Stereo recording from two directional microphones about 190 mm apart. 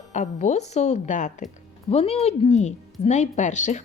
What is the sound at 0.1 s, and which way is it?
Speech, 40° left (ahead or behind).